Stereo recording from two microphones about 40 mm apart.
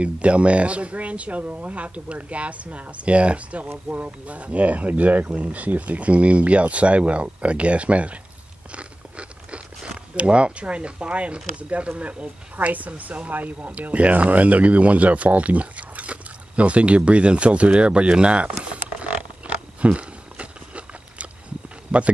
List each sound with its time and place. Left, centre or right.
0.0 s speech: right
8.7 s crunch: right
10.1 s speech: right
13.6 s speech: right
13.8 s a sound: right